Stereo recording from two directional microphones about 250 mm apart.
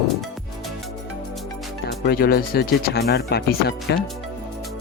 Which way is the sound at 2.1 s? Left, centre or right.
Left.